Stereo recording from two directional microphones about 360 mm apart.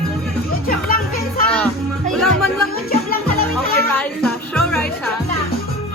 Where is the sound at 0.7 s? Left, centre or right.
Left.